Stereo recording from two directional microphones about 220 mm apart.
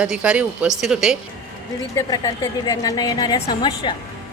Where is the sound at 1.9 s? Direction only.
20° left (ahead or behind).